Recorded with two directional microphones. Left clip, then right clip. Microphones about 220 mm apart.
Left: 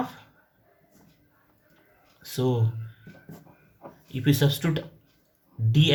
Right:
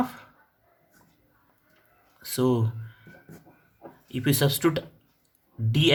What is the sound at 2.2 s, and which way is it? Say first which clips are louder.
Speech: right 3 dB; 45° right (ahead or behind).